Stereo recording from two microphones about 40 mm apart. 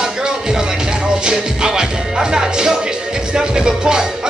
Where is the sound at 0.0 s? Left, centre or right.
Centre.